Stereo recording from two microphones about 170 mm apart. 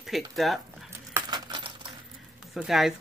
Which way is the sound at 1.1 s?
25° right (ahead or behind).